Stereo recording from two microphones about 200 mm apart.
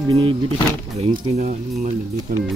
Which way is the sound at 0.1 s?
25° right (ahead or behind).